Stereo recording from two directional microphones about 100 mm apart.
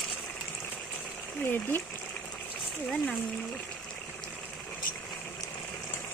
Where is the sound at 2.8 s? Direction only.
5° left (ahead or behind).